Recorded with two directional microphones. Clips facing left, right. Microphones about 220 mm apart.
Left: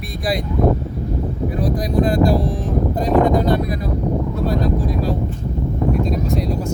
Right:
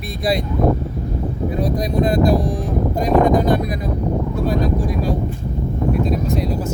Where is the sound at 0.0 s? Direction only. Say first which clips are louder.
Right 2 dB; 25° right (ahead or behind).